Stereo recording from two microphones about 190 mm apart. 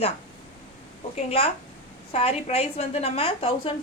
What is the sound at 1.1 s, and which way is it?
A woman's voice, 30° left (ahead or behind).